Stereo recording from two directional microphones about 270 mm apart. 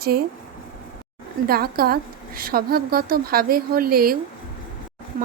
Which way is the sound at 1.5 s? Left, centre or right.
Right.